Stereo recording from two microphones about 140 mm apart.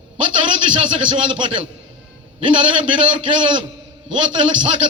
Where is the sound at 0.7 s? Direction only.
40° right (ahead or behind).